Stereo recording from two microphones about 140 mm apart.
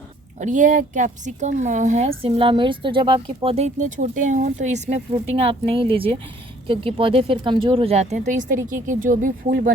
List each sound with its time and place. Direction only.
0.3 s a woman's voice: 60° right (ahead or behind)
2.0 s speech: 40° right (ahead or behind); by 9.7 s 75° right (ahead or behind)